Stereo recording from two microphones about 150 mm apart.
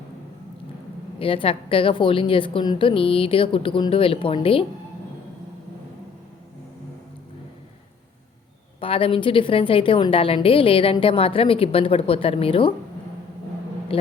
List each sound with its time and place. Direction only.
1.2 s a woman's voice: 35° left (ahead or behind)
8.8 s a woman's voice: 35° left (ahead or behind)
13.9 s a woman's voice: 40° left (ahead or behind)